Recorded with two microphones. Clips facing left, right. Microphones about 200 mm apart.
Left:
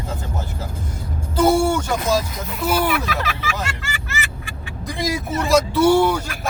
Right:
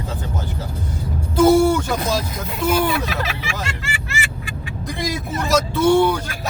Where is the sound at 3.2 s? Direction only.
30° right (ahead or behind).